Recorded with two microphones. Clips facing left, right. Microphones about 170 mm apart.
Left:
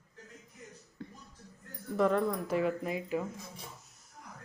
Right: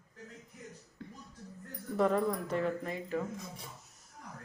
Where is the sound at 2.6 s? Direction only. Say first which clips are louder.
Left 2 dB; 10° left (ahead or behind).